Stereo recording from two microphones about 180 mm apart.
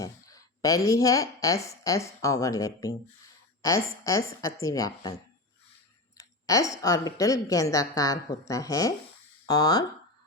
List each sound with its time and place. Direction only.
0.0 s a woman's voice: 20° left (ahead or behind)
6.1 s a woman's voice: 20° left (ahead or behind)